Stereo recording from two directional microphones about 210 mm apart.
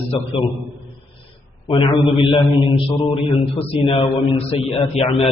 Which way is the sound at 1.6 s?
25° left (ahead or behind).